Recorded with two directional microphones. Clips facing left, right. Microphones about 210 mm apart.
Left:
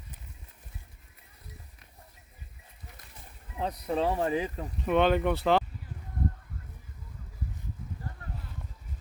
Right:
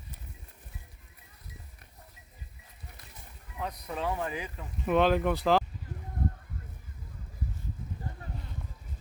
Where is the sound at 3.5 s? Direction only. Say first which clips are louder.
Left 6 dB; 30° left (ahead or behind).